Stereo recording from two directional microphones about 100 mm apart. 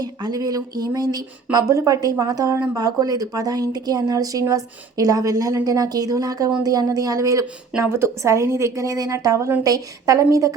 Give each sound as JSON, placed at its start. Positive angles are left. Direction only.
{"t": 0.0, "sound": "speech", "side_deg": -40}